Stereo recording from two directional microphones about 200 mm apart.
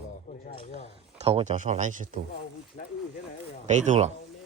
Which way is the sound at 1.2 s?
35° right (ahead or behind).